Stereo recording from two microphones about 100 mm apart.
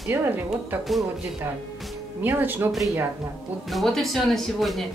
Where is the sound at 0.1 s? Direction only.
25° right (ahead or behind).